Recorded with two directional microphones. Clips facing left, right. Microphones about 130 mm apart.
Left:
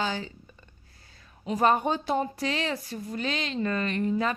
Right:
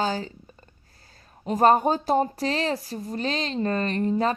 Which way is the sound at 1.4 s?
40° right (ahead or behind).